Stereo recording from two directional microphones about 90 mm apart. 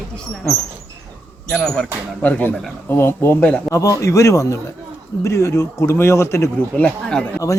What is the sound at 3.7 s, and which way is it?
A man's voice, 35° left (ahead or behind).